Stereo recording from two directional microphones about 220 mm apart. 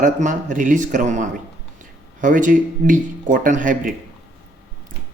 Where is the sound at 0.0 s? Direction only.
35° right (ahead or behind).